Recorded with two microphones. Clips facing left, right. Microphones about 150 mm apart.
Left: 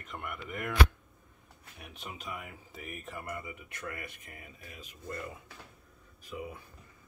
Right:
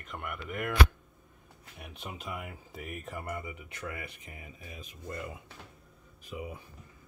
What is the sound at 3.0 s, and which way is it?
Speech, 25° right (ahead or behind).